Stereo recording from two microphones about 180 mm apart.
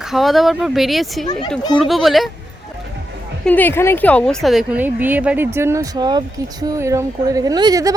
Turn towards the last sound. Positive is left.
turn(degrees=-20)  # may be behind; listen again after turning